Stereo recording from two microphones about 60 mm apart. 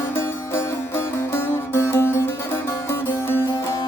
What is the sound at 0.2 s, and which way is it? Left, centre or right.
Music, left.